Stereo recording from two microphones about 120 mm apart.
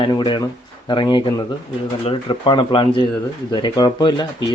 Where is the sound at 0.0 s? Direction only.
40° left (ahead or behind).